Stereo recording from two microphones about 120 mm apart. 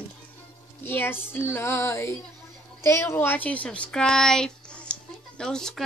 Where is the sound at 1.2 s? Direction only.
15° left (ahead or behind).